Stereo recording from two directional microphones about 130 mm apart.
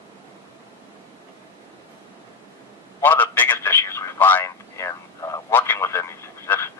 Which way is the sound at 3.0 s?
15° left (ahead or behind).